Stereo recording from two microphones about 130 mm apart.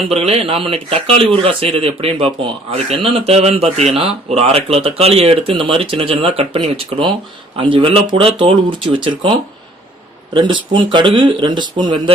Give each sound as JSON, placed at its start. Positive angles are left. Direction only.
{"t": 0.1, "sound": "speech", "side_deg": -55}
{"t": 10.3, "sound": "speech", "side_deg": -40}